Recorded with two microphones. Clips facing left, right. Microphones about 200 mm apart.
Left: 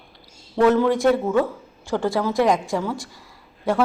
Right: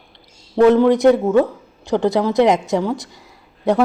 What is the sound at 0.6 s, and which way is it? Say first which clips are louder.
A man's voice: right 5 dB; 15° right (ahead or behind).